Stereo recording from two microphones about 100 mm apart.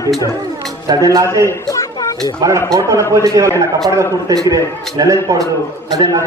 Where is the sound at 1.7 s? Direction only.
35° left (ahead or behind).